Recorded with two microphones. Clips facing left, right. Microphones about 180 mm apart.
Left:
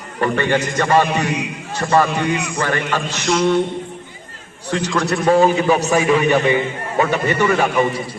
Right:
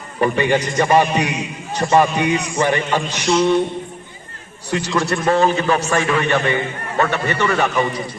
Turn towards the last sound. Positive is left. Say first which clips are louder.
# left 2 dB
turn(degrees=10)  # may be behind; listen again after turning